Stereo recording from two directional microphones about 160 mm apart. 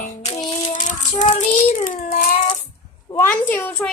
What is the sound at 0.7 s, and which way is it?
Child singing, 50° left (ahead or behind).